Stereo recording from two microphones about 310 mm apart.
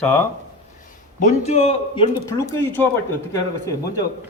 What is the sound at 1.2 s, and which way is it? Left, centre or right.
Speech, left.